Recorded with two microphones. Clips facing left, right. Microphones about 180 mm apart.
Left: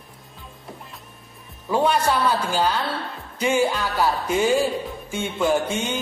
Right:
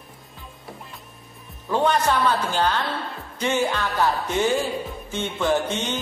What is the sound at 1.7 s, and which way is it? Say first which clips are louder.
Speech: left 1 dB; 10° left (ahead or behind).